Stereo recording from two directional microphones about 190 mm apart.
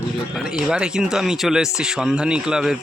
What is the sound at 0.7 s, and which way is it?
Speech, 5° right (ahead or behind).